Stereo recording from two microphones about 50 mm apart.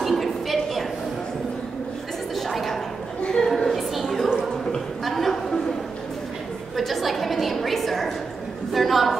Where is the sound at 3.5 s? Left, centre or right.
Centre.